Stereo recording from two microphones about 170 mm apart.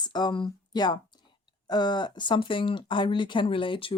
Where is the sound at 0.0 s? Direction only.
25° left (ahead or behind).